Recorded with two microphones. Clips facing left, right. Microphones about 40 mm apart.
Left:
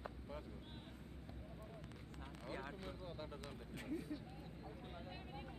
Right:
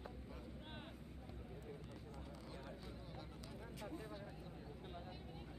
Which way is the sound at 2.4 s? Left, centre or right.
Left.